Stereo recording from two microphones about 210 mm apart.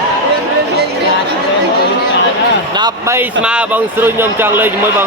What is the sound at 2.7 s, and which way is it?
Speech, 15° right (ahead or behind).